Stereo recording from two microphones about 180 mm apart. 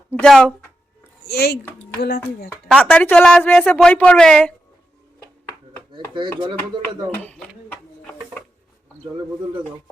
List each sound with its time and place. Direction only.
0.1 s speech: 5° left (ahead or behind)
1.3 s speech: 65° left (ahead or behind)
2.5 s speech: 5° left (ahead or behind)
5.9 s speech: 25° right (ahead or behind)
7.3 s a sound: 5° left (ahead or behind)